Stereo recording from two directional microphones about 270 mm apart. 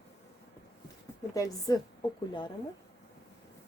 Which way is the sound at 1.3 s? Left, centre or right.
Centre.